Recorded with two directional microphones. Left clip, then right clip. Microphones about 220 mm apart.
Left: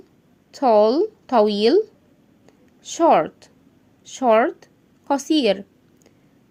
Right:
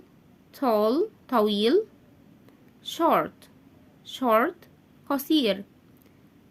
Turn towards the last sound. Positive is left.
turn(degrees=30)  # may be behind; listen again after turning